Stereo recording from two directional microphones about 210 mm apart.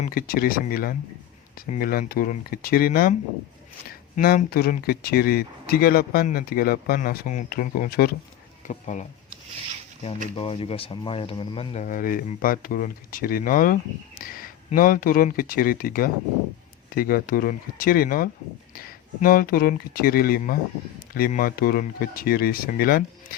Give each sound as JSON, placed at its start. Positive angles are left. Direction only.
{"t": 0.0, "sound": "speech", "side_deg": 45}
{"t": 8.6, "sound": "speech", "side_deg": 35}
{"t": 10.3, "sound": "speech", "side_deg": 25}